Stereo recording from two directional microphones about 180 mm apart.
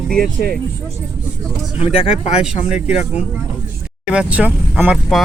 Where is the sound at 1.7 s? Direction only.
30° left (ahead or behind).